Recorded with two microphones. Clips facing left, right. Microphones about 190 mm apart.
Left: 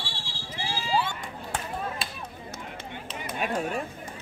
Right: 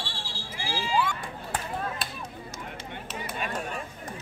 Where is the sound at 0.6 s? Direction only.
30° left (ahead or behind).